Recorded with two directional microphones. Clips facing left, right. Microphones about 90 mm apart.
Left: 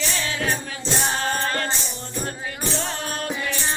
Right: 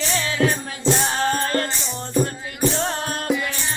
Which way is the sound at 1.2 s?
35° right (ahead or behind).